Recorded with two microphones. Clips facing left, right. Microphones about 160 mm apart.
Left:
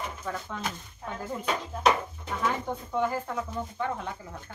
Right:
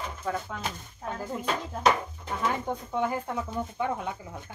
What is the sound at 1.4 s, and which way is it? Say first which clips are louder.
Speech: even; 5° left (ahead or behind).